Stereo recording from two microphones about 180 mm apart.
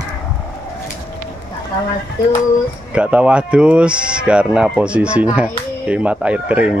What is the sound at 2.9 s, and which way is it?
Speech, 5° right (ahead or behind).